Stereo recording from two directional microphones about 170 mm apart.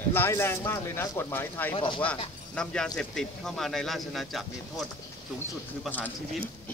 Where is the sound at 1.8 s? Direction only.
30° left (ahead or behind).